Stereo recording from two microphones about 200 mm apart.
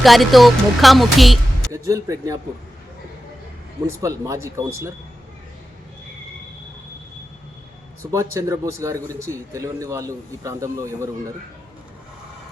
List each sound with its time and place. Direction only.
0.0 s speech: centre (ahead or behind)
1.7 s a man's voice: 15° right (ahead or behind)
4.0 s a man's voice: 15° right (ahead or behind)
8.1 s a man's voice: 15° right (ahead or behind)